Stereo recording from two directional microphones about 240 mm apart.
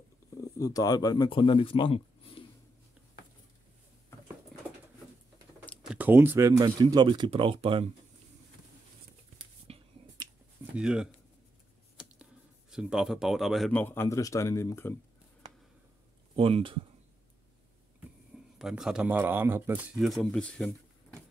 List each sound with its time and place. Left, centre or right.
0.6 s speech: centre
5.7 s speech: centre; by 7.9 s right
9.7 s finger snapping: right
10.6 s speech: centre
12.7 s speech: centre
16.3 s speech: right
18.6 s speech: centre